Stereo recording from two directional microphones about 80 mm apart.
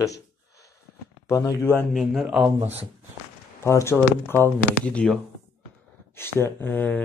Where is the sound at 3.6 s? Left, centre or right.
Left.